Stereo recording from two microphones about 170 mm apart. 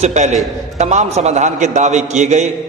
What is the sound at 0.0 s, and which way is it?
A man's voice, 45° right (ahead or behind).